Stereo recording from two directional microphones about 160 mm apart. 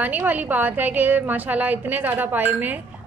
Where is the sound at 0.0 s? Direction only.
10° right (ahead or behind).